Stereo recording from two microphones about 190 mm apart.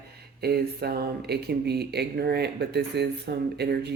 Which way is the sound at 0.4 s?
55° right (ahead or behind).